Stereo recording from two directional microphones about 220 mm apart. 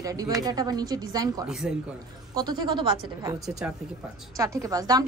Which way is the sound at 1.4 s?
5° right (ahead or behind).